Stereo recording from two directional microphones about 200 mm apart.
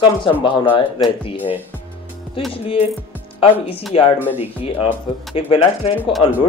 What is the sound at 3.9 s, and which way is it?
Speech, 30° left (ahead or behind).